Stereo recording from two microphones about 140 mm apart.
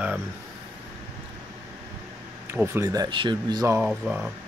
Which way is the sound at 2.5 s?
20° right (ahead or behind).